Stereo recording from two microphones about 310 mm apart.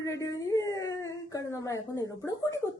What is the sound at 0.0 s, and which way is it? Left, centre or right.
Speech, centre.